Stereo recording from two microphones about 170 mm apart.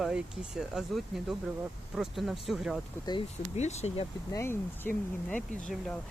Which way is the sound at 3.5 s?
40° left (ahead or behind).